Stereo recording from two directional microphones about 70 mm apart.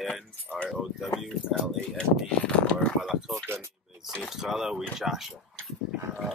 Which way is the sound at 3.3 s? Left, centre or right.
Right.